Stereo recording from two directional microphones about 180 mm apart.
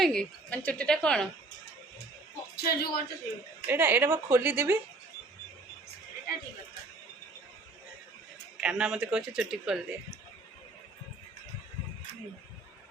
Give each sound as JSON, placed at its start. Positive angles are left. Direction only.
{"t": 0.0, "sound": "a man's voice", "side_deg": 5}
{"t": 2.6, "sound": "a man's voice", "side_deg": 60}
{"t": 3.7, "sound": "a woman's voice", "side_deg": -10}
{"t": 8.6, "sound": "a man's voice", "side_deg": -5}